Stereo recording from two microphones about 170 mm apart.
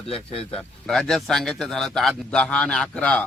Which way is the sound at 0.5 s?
Centre (ahead or behind).